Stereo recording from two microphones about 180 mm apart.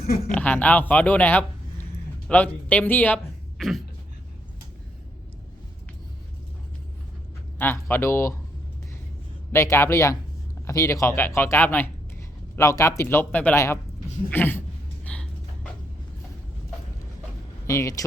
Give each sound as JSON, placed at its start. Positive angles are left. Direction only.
{"t": 0.3, "sound": "a man's voice", "side_deg": 10}
{"t": 3.6, "sound": "a sound", "side_deg": 0}
{"t": 7.6, "sound": "speech", "side_deg": 10}
{"t": 9.5, "sound": "speech", "side_deg": 15}
{"t": 15.0, "sound": "a sound", "side_deg": 5}
{"t": 17.7, "sound": "speech", "side_deg": 15}